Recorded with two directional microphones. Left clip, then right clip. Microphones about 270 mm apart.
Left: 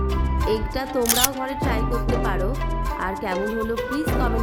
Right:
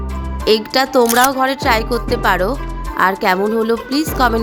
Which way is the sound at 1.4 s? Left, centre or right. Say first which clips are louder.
Right 11 dB; right.